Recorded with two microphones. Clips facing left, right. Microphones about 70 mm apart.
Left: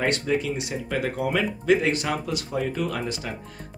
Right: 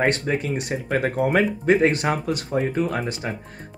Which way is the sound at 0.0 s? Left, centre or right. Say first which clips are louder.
Right 2 dB; right.